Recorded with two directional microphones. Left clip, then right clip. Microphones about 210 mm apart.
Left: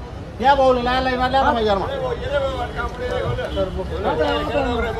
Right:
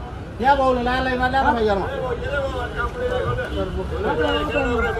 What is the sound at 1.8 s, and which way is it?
Speech, 40° left (ahead or behind).